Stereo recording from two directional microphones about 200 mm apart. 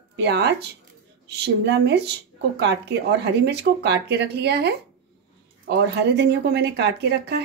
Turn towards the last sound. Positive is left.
turn(degrees=-55)  # may be behind; listen again after turning